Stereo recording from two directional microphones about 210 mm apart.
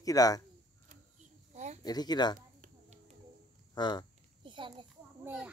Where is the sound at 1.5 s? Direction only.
35° right (ahead or behind).